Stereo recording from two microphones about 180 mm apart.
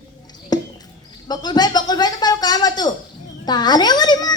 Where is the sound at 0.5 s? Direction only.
20° left (ahead or behind).